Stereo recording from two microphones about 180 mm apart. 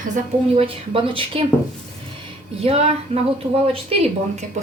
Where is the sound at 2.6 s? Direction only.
35° right (ahead or behind).